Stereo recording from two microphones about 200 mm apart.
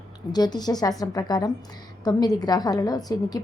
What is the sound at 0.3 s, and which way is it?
A woman's voice, 20° left (ahead or behind).